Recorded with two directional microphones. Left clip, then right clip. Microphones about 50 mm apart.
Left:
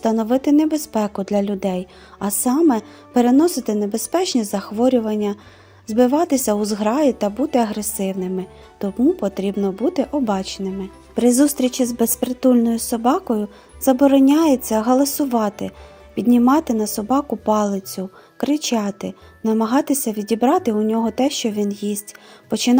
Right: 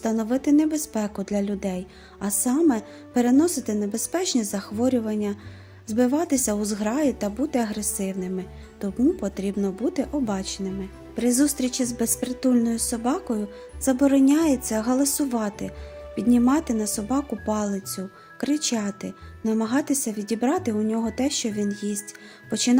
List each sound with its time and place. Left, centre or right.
0.0 s a woman's voice: left
11.3 s a woman's voice: left
12.6 s a woman's voice: left
13.8 s a woman's voice: left